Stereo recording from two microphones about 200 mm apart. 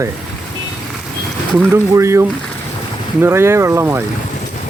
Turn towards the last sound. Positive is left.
turn(degrees=-10)  # may be behind; listen again after turning